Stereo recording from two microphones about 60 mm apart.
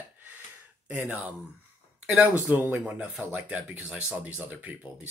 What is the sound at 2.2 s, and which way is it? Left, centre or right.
Speech, right.